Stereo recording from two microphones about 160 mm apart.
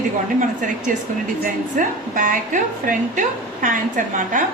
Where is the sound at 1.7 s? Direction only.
55° right (ahead or behind).